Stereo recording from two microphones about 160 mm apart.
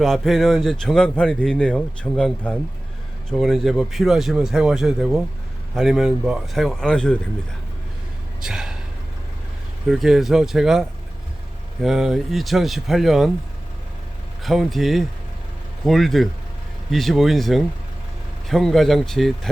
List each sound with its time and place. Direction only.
0.0 s a man's voice: centre (ahead or behind)
8.4 s gasp: 5° right (ahead or behind)
9.9 s a man's voice: centre (ahead or behind)
14.4 s a man's voice: centre (ahead or behind)